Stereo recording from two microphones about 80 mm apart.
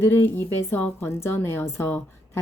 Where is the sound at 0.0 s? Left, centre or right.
Left.